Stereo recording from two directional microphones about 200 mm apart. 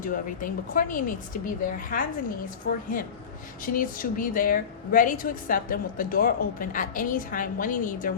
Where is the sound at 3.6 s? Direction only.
45° left (ahead or behind).